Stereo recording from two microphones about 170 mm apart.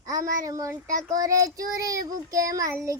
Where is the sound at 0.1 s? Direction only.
20° right (ahead or behind).